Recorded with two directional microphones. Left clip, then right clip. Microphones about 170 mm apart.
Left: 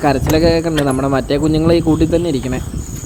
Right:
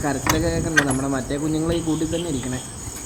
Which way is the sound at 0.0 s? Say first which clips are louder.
Left 9 dB; 55° left (ahead or behind).